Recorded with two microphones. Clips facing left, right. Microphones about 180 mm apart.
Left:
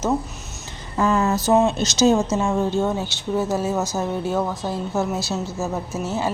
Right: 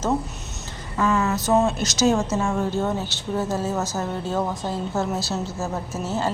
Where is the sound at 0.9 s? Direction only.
35° left (ahead or behind).